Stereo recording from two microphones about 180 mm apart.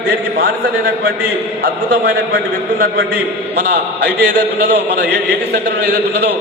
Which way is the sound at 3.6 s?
65° right (ahead or behind).